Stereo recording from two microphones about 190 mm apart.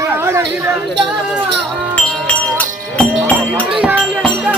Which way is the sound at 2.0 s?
5° left (ahead or behind).